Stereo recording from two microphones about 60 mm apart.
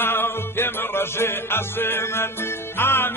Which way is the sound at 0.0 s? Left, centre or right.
Left.